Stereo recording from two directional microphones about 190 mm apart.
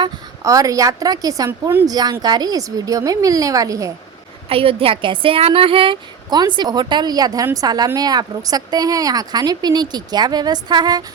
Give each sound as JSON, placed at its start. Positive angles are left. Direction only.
{"t": 0.0, "sound": "a woman's voice", "side_deg": -15}
{"t": 4.4, "sound": "speech", "side_deg": -30}